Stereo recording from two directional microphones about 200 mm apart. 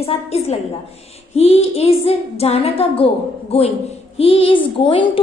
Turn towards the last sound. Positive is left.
turn(degrees=25)  # may be behind; listen again after turning